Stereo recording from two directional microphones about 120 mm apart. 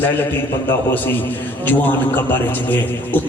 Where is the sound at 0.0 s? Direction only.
15° left (ahead or behind).